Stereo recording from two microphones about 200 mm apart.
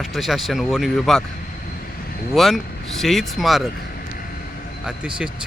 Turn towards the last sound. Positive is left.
turn(degrees=-5)  # may be behind; listen again after turning